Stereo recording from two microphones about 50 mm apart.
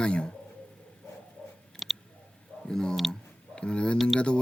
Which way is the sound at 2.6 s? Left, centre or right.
Centre.